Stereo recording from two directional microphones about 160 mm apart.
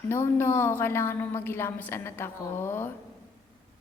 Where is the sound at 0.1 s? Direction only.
15° left (ahead or behind).